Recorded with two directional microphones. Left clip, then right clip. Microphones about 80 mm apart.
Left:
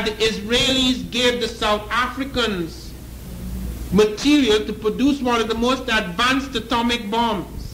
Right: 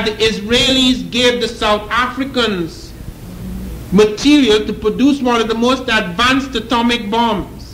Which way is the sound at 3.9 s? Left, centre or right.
Left.